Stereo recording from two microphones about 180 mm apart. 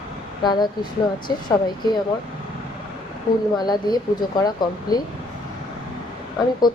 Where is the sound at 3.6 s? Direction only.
25° left (ahead or behind).